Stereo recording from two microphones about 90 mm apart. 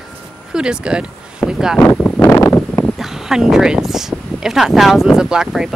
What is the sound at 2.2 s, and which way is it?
Wind noise, 30° left (ahead or behind).